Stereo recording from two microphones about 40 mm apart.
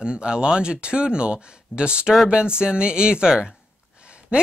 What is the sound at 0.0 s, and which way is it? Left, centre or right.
Speech, right.